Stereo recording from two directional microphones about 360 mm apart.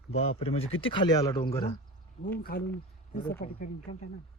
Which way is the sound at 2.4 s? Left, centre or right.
Left.